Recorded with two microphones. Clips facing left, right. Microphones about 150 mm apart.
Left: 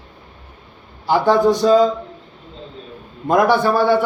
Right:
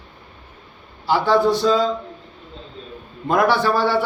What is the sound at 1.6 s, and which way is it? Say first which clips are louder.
Speech: left 5 dB; 45° left (ahead or behind).